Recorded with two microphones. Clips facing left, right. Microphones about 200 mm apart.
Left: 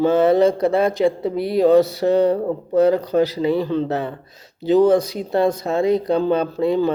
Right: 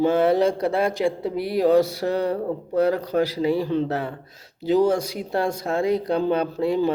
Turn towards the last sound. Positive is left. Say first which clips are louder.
# left 3 dB
turn(degrees=-10)  # may be behind; listen again after turning